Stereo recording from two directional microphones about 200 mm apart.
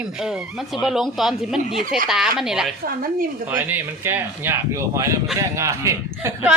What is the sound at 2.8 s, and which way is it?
Speech, 45° right (ahead or behind).